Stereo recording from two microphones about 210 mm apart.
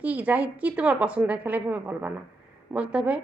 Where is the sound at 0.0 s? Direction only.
5° right (ahead or behind).